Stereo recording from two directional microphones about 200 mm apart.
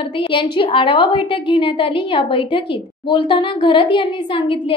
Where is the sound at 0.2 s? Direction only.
25° left (ahead or behind).